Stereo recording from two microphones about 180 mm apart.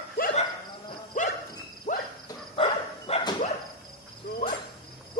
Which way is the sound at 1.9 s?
45° left (ahead or behind).